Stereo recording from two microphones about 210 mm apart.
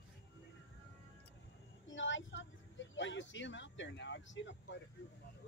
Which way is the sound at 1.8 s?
65° left (ahead or behind).